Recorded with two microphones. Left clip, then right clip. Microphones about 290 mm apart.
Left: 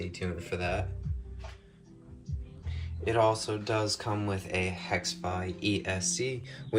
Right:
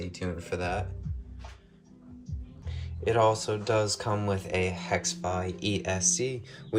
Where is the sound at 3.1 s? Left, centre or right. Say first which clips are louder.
Right 2 dB; centre.